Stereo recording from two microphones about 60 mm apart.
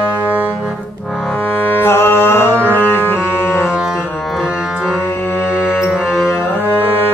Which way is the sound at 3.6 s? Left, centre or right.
Centre.